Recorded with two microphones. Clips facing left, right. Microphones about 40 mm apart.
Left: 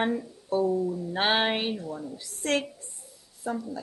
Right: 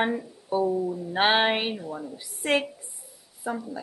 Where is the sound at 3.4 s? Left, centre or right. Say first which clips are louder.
Right 1 dB; centre.